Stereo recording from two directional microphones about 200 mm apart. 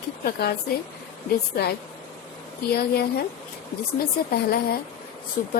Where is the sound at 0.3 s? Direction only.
50° left (ahead or behind).